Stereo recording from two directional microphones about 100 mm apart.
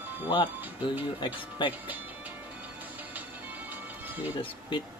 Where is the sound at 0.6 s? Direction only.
20° right (ahead or behind).